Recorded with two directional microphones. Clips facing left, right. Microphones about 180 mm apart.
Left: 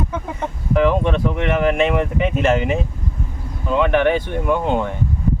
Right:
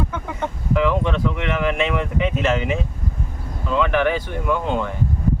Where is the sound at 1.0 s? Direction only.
50° left (ahead or behind).